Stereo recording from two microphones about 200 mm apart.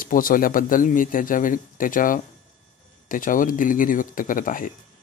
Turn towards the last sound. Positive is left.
turn(degrees=45)  # may be behind; listen again after turning